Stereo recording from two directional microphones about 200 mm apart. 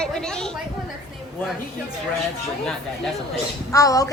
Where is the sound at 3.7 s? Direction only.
15° left (ahead or behind).